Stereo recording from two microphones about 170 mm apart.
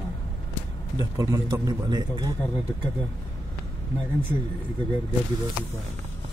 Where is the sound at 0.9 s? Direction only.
20° right (ahead or behind).